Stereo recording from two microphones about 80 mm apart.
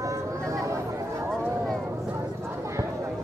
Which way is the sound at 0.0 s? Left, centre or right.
Right.